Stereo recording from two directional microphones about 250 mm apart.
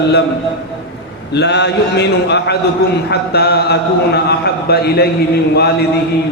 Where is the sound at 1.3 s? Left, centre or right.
Left.